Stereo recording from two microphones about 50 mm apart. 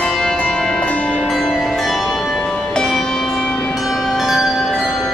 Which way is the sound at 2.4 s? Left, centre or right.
Centre.